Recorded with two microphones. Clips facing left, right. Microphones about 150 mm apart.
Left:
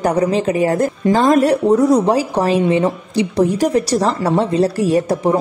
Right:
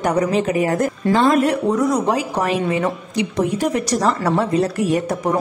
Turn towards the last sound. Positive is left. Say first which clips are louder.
# left 4 dB
turn(degrees=30)  # may be behind; listen again after turning